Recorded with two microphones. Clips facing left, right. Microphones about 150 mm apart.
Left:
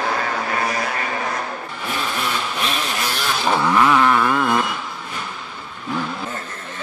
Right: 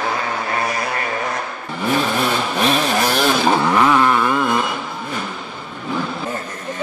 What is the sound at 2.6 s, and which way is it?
Vehicle, 40° right (ahead or behind).